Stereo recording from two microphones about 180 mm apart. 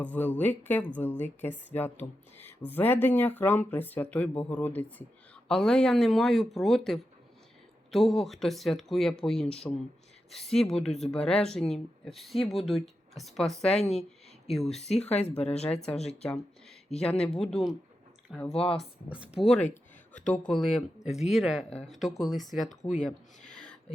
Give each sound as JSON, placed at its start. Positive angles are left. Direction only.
{"t": 0.0, "sound": "speech", "side_deg": 10}
{"t": 14.8, "sound": "speech", "side_deg": 35}
{"t": 17.4, "sound": "speech", "side_deg": 0}
{"t": 18.5, "sound": "speech", "side_deg": 30}
{"t": 19.4, "sound": "speech", "side_deg": 5}
{"t": 23.5, "sound": "a sound", "side_deg": 5}